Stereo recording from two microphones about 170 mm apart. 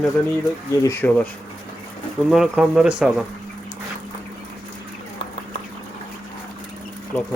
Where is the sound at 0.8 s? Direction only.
20° left (ahead or behind).